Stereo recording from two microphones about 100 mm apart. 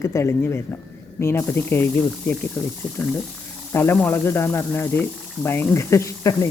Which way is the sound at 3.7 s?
20° left (ahead or behind).